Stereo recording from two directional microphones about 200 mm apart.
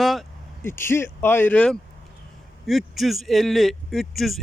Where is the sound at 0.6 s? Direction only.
10° left (ahead or behind).